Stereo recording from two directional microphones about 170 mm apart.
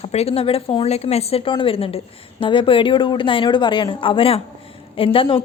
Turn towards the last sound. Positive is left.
turn(degrees=30)  # may be behind; listen again after turning